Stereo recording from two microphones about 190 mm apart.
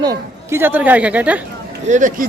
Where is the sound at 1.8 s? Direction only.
40° right (ahead or behind).